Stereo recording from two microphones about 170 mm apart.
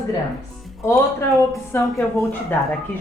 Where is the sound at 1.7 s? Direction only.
15° left (ahead or behind).